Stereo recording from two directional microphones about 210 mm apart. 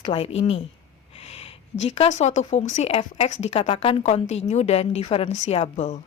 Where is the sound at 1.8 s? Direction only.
30° left (ahead or behind).